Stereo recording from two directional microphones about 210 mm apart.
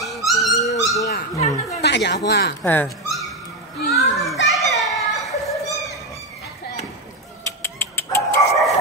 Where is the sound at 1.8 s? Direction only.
55° left (ahead or behind).